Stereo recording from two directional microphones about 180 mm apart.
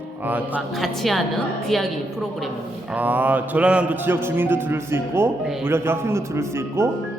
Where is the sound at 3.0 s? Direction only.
10° right (ahead or behind).